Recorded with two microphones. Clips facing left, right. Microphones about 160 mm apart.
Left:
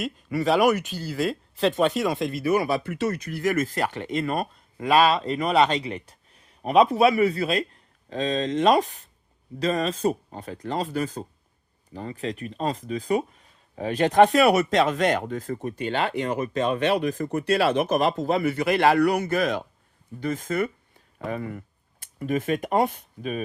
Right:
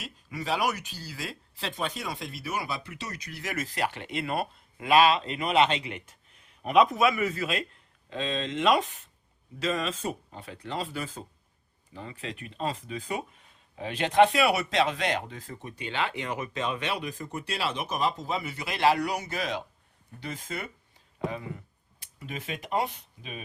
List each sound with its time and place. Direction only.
0.0 s speech: 55° left (ahead or behind)
1.9 s speech: 70° left (ahead or behind)
2.1 s speech: 50° left (ahead or behind)